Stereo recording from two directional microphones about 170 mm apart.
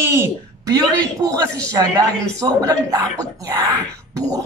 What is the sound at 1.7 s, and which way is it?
Speech, 20° right (ahead or behind).